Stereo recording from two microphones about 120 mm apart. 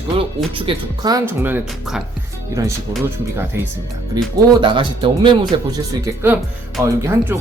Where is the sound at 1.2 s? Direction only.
15° right (ahead or behind).